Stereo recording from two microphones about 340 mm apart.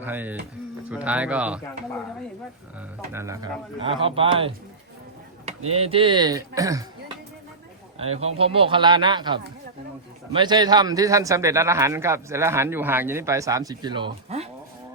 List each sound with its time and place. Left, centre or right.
0.0 s speech: centre
3.1 s a man's voice: centre
5.7 s a man's voice: centre
8.2 s a man's voice: centre